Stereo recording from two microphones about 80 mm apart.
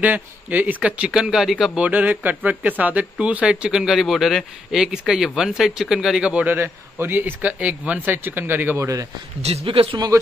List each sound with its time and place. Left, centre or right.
0.0 s speech: right; by 1.7 s centre
1.8 s speech: centre
8.7 s a man's voice: right
9.7 s speech: right